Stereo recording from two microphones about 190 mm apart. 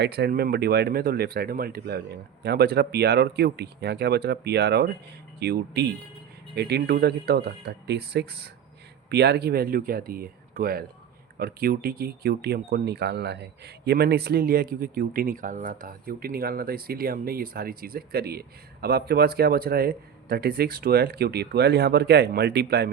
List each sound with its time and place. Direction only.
0.0 s speech: 60° right (ahead or behind)